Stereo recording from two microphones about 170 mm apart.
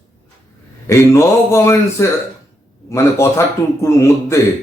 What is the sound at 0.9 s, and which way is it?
A man's voice, 15° left (ahead or behind).